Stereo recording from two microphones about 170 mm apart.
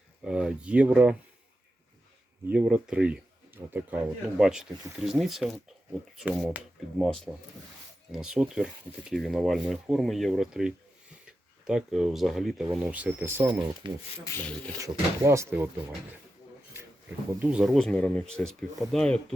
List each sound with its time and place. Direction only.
0.3 s speech: 5° right (ahead or behind)
2.5 s speech: 5° right (ahead or behind)
13.8 s speech: 30° right (ahead or behind)
14.3 s speech: 20° left (ahead or behind)
14.8 s speech: 20° right (ahead or behind)
17.4 s speech: 5° right (ahead or behind)